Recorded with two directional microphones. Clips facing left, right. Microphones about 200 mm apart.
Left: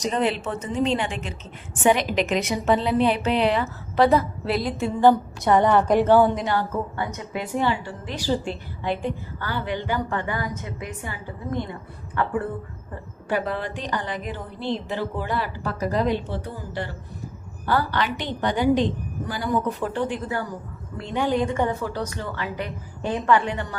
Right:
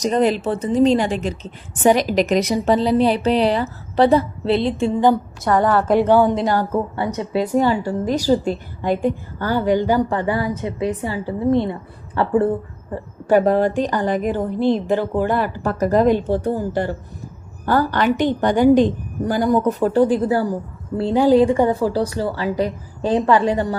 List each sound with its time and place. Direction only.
0.0 s a woman's voice: 40° right (ahead or behind)
5.5 s a woman's voice: 20° left (ahead or behind)
6.0 s speech: 15° right (ahead or behind)
6.3 s a woman's voice: 40° right (ahead or behind)